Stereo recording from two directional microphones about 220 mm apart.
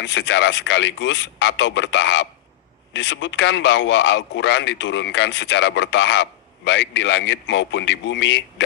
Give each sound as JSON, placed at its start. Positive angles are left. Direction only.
{"t": 0.0, "sound": "a man's voice", "side_deg": 55}